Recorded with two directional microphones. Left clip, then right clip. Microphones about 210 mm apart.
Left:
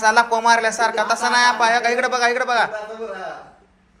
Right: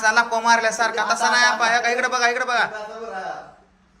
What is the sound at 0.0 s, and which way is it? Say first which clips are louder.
A man's voice: left 3 dB; 10° right (ahead or behind).